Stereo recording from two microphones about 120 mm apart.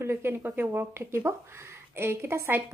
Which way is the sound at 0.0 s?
20° right (ahead or behind).